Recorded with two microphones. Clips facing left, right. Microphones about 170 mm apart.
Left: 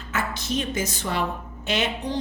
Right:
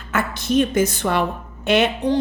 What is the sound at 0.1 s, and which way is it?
A woman's voice, 55° right (ahead or behind).